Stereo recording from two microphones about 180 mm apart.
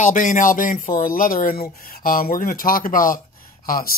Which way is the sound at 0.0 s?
45° left (ahead or behind).